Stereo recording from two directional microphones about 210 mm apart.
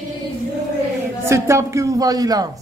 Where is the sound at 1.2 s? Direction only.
15° right (ahead or behind).